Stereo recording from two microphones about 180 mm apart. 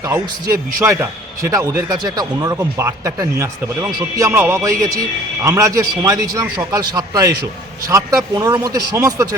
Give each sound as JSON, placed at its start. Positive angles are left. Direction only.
{"t": 0.8, "sound": "speech", "side_deg": -15}